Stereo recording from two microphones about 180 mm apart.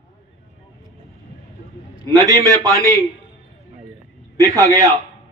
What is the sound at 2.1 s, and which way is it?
Speech, 20° right (ahead or behind).